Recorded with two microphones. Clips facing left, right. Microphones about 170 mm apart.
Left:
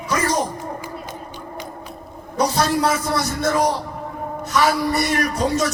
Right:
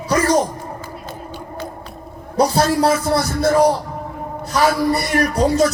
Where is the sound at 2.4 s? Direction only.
35° right (ahead or behind).